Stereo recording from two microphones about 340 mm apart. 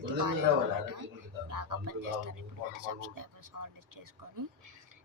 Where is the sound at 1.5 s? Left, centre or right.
Right.